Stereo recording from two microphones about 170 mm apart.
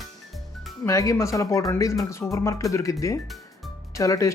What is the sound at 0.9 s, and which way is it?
Speech, 20° left (ahead or behind).